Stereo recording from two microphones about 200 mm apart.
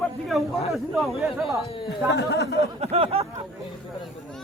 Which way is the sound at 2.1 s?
55° left (ahead or behind).